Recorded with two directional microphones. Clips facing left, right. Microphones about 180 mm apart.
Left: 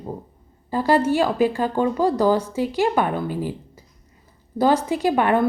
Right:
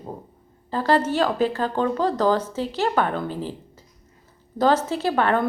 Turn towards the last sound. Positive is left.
turn(degrees=15)  # may be behind; listen again after turning